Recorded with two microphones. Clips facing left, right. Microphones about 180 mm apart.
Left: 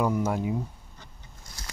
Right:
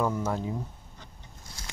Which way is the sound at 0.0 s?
10° left (ahead or behind).